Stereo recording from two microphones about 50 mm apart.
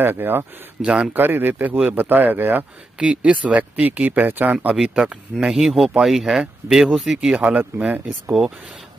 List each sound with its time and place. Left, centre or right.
0.0 s speech: right
3.0 s speech: right
4.8 s speech: centre
7.3 s speech: right